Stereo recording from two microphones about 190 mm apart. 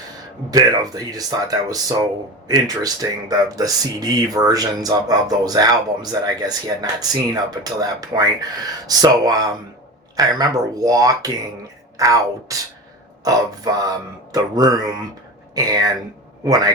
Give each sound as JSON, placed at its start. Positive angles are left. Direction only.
{"t": 0.5, "sound": "a woman's voice", "side_deg": -20}